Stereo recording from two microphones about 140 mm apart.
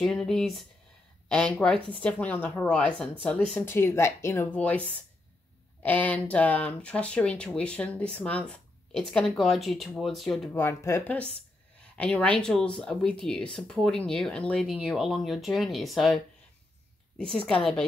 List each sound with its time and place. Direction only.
0.0 s speech: 5° left (ahead or behind)
10.5 s speech: 15° left (ahead or behind); by 16.2 s centre (ahead or behind)
17.2 s speech: 5° left (ahead or behind)